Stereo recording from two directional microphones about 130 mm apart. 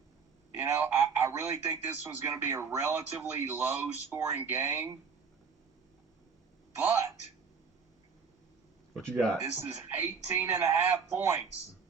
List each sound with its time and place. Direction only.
0.5 s speech: 20° right (ahead or behind)
6.7 s a man's voice: 15° right (ahead or behind)
9.4 s speech: 15° right (ahead or behind)